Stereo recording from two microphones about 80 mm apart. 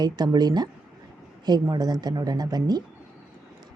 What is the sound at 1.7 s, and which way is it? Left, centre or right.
Speech, right.